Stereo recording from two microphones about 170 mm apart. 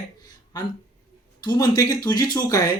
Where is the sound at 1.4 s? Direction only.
25° left (ahead or behind).